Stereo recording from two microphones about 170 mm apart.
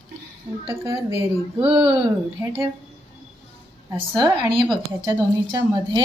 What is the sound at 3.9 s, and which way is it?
Speech, 30° right (ahead or behind).